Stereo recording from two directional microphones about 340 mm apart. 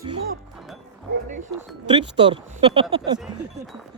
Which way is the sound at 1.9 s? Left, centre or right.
Centre.